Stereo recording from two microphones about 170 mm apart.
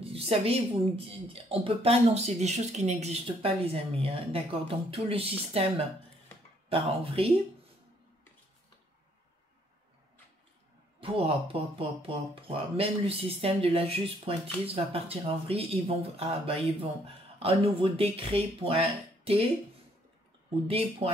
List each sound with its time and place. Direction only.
0.0 s a woman's voice: 35° right (ahead or behind)
11.0 s a woman's voice: 35° right (ahead or behind)
20.6 s speech: 35° right (ahead or behind)